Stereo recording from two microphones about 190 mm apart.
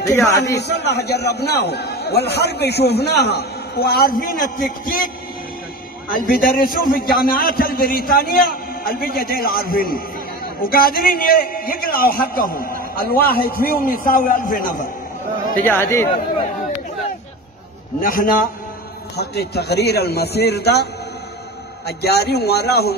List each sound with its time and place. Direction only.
0.6 s a man's voice: 60° left (ahead or behind)
15.6 s speech: 10° left (ahead or behind)
18.0 s a man's voice: 50° left (ahead or behind)
19.1 s a man's voice: 60° left (ahead or behind)